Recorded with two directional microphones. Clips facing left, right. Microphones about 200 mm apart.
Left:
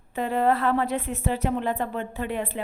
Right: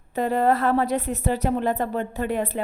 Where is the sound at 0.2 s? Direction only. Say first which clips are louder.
Right 2 dB; 40° right (ahead or behind).